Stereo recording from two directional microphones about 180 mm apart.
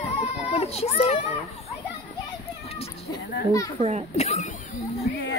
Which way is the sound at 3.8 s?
40° right (ahead or behind).